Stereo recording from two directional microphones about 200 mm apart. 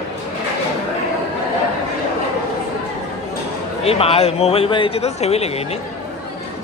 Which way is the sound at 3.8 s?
30° left (ahead or behind).